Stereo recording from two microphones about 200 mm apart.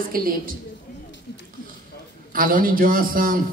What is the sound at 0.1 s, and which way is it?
Speech, 45° right (ahead or behind).